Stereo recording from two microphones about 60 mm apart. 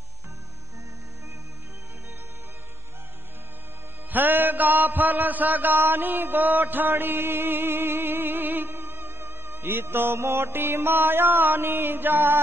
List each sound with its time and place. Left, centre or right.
4.1 s mantra: right